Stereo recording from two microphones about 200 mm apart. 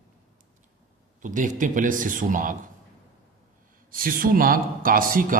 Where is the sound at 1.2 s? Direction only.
40° right (ahead or behind).